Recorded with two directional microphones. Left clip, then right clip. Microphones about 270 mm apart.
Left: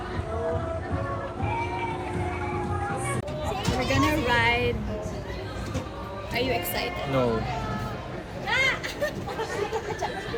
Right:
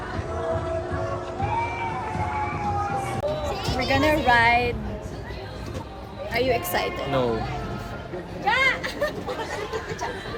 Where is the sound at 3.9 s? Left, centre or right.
Centre.